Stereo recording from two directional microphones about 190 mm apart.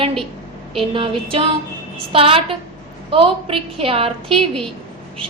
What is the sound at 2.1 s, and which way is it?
A woman's voice, 30° right (ahead or behind).